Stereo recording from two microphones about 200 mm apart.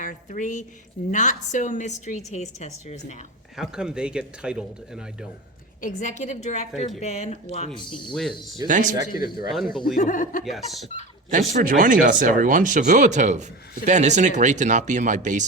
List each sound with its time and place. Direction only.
0.0 s a woman's voice: 40° left (ahead or behind)
3.6 s speech: 5° right (ahead or behind)
5.8 s a woman's voice: 40° left (ahead or behind)
7.8 s speech: 25° left (ahead or behind)
8.1 s speech: centre (ahead or behind)
8.6 s speech: 40° right (ahead or behind)
9.8 s speech: 45° left (ahead or behind)
10.4 s speech: centre (ahead or behind)
11.3 s speech: 40° right (ahead or behind)